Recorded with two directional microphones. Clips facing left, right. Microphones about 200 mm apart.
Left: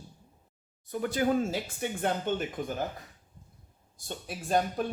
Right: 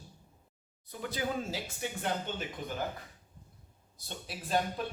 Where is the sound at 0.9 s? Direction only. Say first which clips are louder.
Left 8 dB; 50° left (ahead or behind).